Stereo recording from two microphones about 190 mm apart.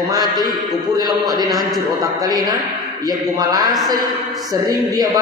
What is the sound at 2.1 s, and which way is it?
A man's voice, 20° right (ahead or behind).